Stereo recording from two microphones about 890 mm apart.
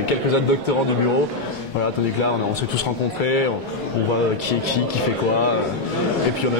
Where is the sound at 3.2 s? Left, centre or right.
Left.